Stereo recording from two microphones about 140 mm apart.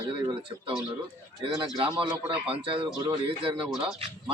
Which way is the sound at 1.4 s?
35° right (ahead or behind).